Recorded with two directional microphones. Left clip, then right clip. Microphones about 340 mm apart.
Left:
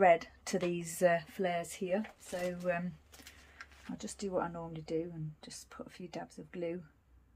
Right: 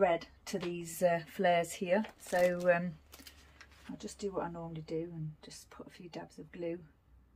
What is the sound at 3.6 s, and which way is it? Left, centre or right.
Speech, centre.